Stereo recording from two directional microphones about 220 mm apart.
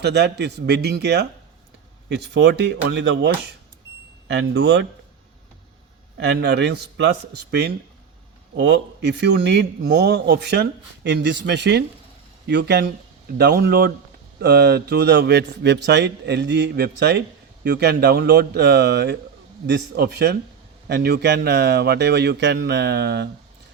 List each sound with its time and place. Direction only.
0.0 s a man's voice: 50° right (ahead or behind)
6.1 s a man's voice: 50° right (ahead or behind)